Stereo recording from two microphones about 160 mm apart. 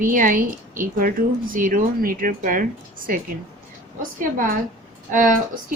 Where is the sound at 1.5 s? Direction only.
60° right (ahead or behind).